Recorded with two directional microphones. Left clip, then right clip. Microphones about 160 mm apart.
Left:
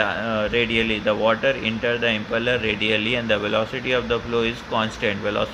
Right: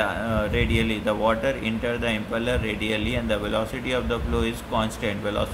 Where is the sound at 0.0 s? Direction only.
25° left (ahead or behind).